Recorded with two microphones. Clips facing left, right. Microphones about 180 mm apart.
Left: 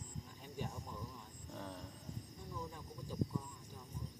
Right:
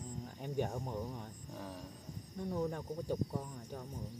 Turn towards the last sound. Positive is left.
turn(degrees=-65)  # may be behind; listen again after turning